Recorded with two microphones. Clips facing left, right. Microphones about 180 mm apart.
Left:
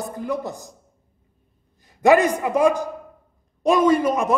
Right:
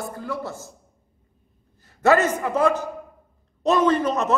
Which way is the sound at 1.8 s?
15° left (ahead or behind).